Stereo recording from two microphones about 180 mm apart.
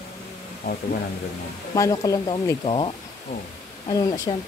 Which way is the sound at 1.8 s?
20° left (ahead or behind).